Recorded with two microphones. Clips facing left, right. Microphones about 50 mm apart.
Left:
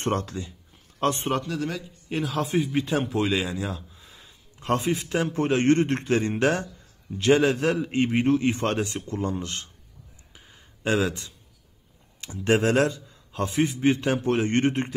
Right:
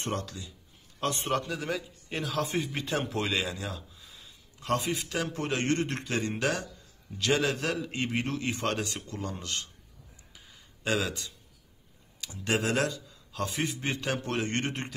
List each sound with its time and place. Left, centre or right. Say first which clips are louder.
0.0 s a man's voice: left 7 dB; left
1.3 s a man's voice: left 3 dB; centre
3.9 s a man's voice: left 2 dB; left
10.3 s a sound: left 4 dB; left
12.2 s a man's voice: left 7 dB; left